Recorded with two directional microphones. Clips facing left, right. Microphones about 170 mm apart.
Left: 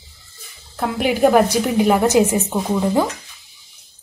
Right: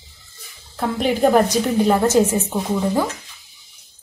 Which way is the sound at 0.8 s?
10° left (ahead or behind).